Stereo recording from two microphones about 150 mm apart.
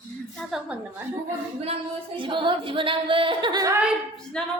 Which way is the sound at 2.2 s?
35° right (ahead or behind).